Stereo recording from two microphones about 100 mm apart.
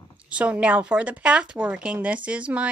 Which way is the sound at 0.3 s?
10° right (ahead or behind).